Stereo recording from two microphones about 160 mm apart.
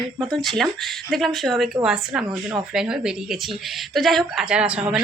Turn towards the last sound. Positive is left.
turn(degrees=-5)  # may be behind; listen again after turning